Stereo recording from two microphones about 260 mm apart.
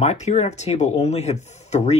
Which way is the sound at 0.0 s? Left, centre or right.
Left.